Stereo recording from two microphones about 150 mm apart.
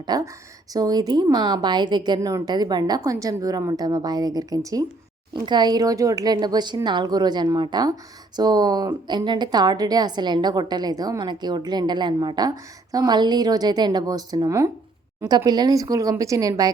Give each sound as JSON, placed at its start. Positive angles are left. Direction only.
{"t": 0.1, "sound": "a woman's voice", "side_deg": -25}